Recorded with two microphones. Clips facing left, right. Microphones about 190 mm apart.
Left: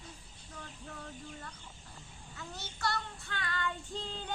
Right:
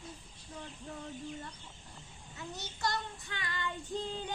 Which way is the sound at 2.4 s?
20° right (ahead or behind).